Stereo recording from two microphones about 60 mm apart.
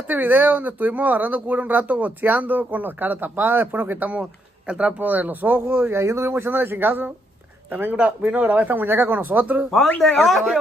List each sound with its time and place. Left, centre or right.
0.1 s speech: right
5.7 s speech: right
6.3 s speech: right
9.9 s a man's voice: centre